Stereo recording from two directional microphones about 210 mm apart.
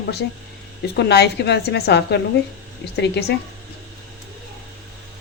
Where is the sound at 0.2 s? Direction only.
55° left (ahead or behind).